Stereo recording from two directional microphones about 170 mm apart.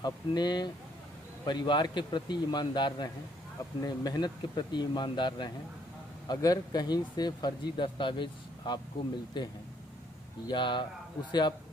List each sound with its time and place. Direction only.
0.0 s speech: 25° left (ahead or behind)